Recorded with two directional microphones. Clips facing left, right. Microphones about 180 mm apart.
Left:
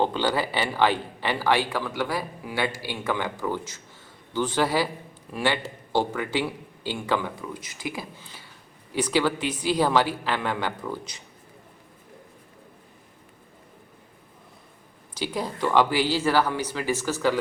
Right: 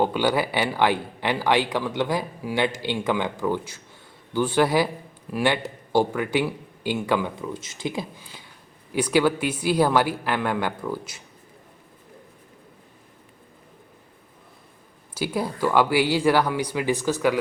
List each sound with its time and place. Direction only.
0.0 s speech: 10° right (ahead or behind)
7.5 s speech: 25° right (ahead or behind); by 11.2 s 5° right (ahead or behind)
15.1 s speech: 10° right (ahead or behind)